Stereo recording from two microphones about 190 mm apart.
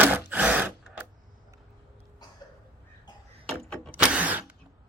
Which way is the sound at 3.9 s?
5° right (ahead or behind).